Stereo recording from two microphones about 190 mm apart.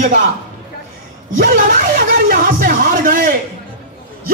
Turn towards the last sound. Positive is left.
turn(degrees=-45)  # may be behind; listen again after turning